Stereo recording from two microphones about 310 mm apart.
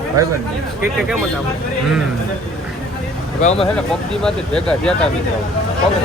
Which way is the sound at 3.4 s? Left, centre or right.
Left.